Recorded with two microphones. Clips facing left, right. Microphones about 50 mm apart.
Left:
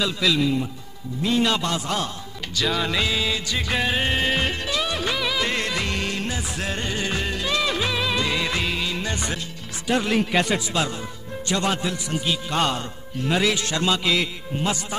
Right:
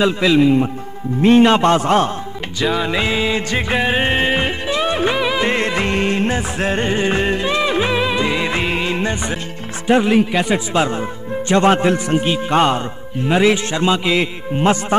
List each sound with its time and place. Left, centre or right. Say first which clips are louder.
0.0 s a man's voice: right 8 dB; right
1.2 s a man's voice: right 11 dB; right
2.6 s a man's voice: right 5 dB; right
3.7 s music: right 6 dB; right
9.8 s a man's voice: right 8 dB; right